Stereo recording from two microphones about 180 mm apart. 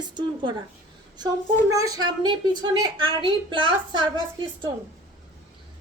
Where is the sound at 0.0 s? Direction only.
25° right (ahead or behind).